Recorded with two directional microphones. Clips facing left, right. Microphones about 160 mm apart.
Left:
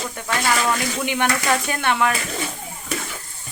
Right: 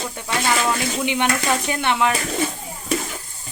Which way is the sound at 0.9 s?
20° right (ahead or behind).